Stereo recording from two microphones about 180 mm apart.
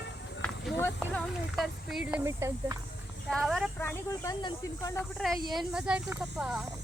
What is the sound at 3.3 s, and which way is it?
Speech, centre (ahead or behind).